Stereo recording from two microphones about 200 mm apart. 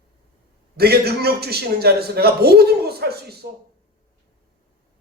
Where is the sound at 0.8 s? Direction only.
50° right (ahead or behind).